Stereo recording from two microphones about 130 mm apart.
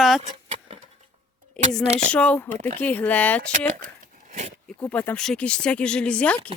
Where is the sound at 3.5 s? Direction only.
80° right.